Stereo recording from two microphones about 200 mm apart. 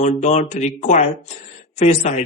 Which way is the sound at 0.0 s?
35° left (ahead or behind).